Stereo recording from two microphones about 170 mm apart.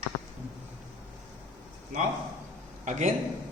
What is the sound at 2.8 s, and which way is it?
Speech, 45° right (ahead or behind).